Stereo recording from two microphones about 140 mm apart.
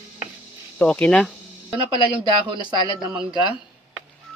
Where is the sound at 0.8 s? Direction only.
10° left (ahead or behind).